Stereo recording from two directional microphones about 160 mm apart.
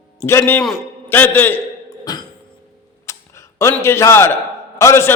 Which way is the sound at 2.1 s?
25° left (ahead or behind).